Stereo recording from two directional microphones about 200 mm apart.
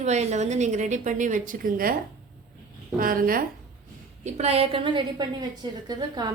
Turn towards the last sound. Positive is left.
turn(degrees=-20)  # may be behind; listen again after turning